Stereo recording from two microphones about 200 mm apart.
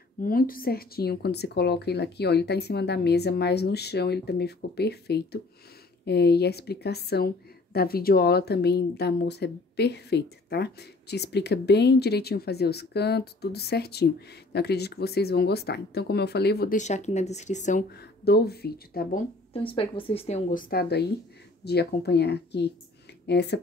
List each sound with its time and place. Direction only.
0.2 s a woman's voice: 45° left (ahead or behind)
16.7 s speech: 35° left (ahead or behind)
17.9 s speech: 55° left (ahead or behind)
19.5 s a woman's voice: 25° left (ahead or behind); by 23.6 s 55° left (ahead or behind)